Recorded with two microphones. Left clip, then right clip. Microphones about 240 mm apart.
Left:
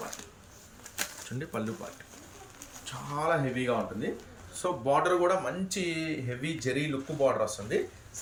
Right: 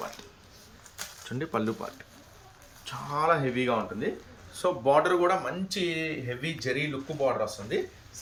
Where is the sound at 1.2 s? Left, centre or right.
Centre.